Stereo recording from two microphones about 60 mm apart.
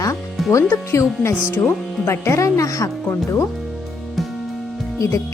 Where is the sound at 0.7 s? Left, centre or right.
Left.